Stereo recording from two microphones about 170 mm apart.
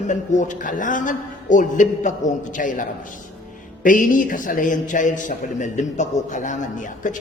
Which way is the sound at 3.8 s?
50° left (ahead or behind).